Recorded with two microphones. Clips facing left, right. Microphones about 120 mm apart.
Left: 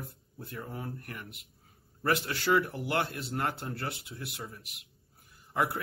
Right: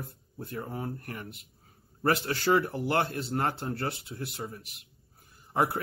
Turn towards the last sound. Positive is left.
turn(degrees=-30)  # may be behind; listen again after turning